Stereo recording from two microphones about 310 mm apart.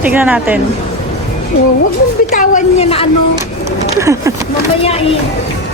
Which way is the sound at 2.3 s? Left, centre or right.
Left.